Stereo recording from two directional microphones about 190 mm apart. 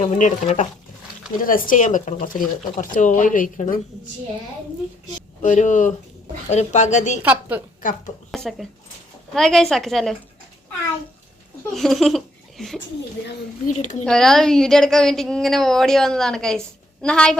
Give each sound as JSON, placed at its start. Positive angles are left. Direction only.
{"t": 0.0, "sound": "speech", "side_deg": 40}
{"t": 5.4, "sound": "speech", "side_deg": 40}
{"t": 7.2, "sound": "a woman's voice", "side_deg": -10}
{"t": 7.8, "sound": "a woman's voice", "side_deg": 45}
{"t": 8.3, "sound": "a woman's voice", "side_deg": 0}
{"t": 11.7, "sound": "speech", "side_deg": 0}
{"t": 13.7, "sound": "speech", "side_deg": 40}
{"t": 14.0, "sound": "a woman's voice", "side_deg": 5}